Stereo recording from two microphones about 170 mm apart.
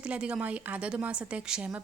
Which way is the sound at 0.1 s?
5° right (ahead or behind).